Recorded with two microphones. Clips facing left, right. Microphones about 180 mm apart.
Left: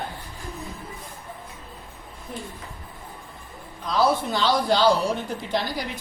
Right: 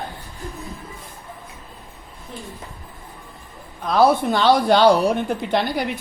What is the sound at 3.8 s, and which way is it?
A woman's voice, 55° right (ahead or behind).